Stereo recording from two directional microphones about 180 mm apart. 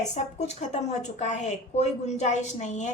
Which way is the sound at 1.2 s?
40° left (ahead or behind).